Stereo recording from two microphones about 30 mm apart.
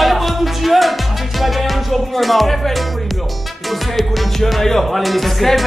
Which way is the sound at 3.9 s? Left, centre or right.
Centre.